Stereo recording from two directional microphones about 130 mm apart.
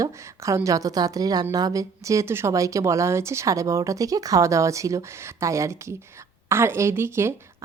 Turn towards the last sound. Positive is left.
turn(degrees=-20)  # may be behind; listen again after turning